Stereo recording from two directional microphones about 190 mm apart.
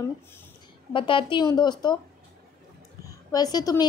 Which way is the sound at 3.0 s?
20° left (ahead or behind).